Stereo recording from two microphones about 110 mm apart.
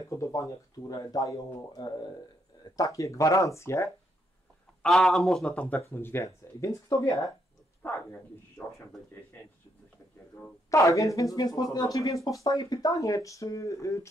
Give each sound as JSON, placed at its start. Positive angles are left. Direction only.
{"t": 0.1, "sound": "speech", "side_deg": 30}
{"t": 4.8, "sound": "speech", "side_deg": 5}
{"t": 5.8, "sound": "speech", "side_deg": 20}
{"t": 10.7, "sound": "speech", "side_deg": 30}